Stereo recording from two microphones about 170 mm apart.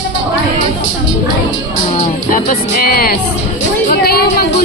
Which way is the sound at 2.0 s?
55° left (ahead or behind).